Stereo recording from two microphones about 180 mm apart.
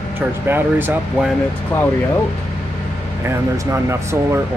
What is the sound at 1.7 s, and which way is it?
Speech, 10° left (ahead or behind).